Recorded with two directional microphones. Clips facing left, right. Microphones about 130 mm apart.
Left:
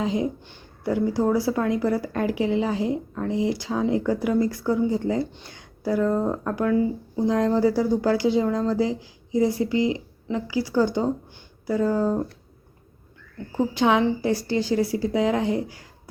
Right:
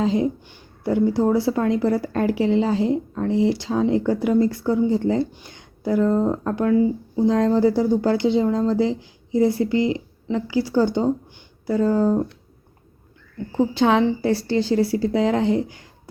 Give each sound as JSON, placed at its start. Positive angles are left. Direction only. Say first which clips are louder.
{"t": 0.0, "sound": "a woman's voice", "louder": "right 4 dB", "side_deg": -30}
{"t": 13.7, "sound": "a woman's voice", "louder": "right 1 dB", "side_deg": -35}